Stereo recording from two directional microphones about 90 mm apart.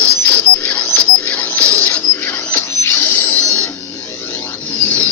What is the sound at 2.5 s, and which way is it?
Printer, 30° left (ahead or behind).